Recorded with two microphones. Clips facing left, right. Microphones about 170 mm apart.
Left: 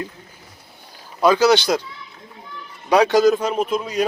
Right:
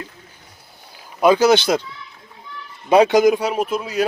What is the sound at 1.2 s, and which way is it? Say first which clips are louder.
Speech: right 1 dB; 20° right (ahead or behind).